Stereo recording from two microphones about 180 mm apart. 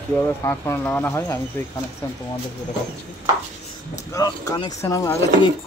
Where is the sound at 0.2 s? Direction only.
15° left (ahead or behind).